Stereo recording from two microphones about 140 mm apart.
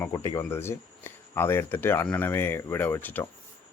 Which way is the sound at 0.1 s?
25° left (ahead or behind).